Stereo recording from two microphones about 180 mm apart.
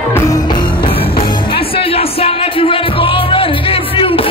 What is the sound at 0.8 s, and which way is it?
Music, 30° left (ahead or behind).